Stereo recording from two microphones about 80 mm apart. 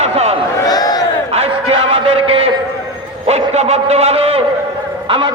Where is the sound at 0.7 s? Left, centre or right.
Left.